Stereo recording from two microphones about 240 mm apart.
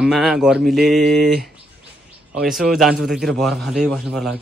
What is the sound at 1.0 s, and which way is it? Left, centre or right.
Speech, right.